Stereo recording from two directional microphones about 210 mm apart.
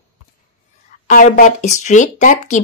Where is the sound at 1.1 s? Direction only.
35° left (ahead or behind).